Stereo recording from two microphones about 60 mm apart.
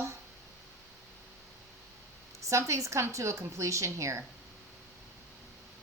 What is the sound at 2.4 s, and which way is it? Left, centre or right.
Speech, right.